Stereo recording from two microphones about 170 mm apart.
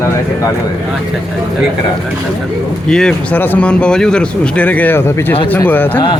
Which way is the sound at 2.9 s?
5° left (ahead or behind).